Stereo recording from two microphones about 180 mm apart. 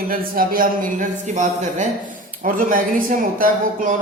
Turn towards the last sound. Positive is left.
turn(degrees=-50)  # may be behind; listen again after turning